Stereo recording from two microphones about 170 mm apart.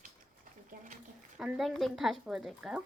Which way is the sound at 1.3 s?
5° right (ahead or behind).